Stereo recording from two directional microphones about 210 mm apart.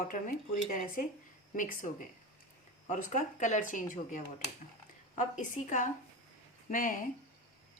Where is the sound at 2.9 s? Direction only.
35° left (ahead or behind).